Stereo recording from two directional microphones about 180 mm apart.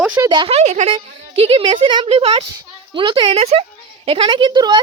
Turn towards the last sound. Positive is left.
turn(degrees=-25)  # may be behind; listen again after turning